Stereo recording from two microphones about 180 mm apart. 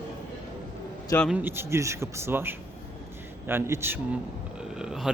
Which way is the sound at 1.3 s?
10° right (ahead or behind).